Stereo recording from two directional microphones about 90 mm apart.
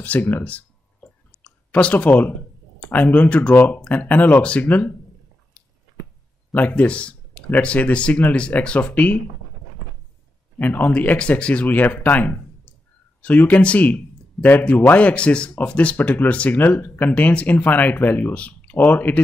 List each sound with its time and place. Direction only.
0.0 s clicking: 15° left (ahead or behind)
2.8 s speech: 20° left (ahead or behind)
6.5 s speech: 15° left (ahead or behind)
10.6 s speech: 20° left (ahead or behind)